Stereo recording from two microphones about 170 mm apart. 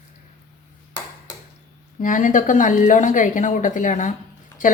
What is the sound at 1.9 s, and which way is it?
Speech, 50° left (ahead or behind).